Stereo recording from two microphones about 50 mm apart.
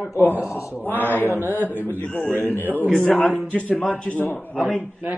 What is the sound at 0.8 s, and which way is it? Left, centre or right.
Speech, left.